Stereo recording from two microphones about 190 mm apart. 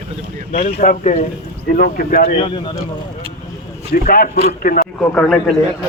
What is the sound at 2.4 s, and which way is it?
Speech, 25° left (ahead or behind).